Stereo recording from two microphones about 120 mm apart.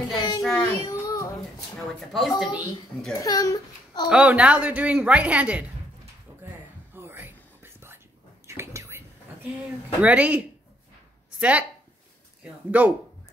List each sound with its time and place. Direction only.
0.1 s a sound: 40° left (ahead or behind)
0.4 s a sound: 5° left (ahead or behind)
0.8 s a sound: 30° left (ahead or behind)
2.1 s a woman's voice: centre (ahead or behind)
3.1 s a child's voice: 30° left (ahead or behind)
4.1 s a woman's voice: 10° right (ahead or behind)
6.4 s whispering: 20° right (ahead or behind)
10.0 s a woman's voice: 10° right (ahead or behind)
12.7 s a woman's voice: 10° right (ahead or behind)